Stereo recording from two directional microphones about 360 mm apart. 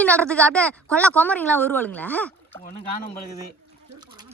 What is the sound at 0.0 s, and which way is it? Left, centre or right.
Speech, centre.